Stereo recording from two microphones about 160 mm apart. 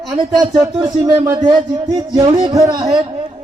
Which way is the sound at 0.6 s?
25° right (ahead or behind).